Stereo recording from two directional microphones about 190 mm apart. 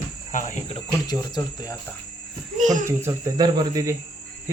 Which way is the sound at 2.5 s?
40° right (ahead or behind).